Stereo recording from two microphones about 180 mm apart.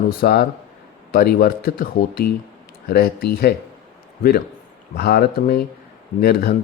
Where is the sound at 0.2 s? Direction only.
60° left (ahead or behind).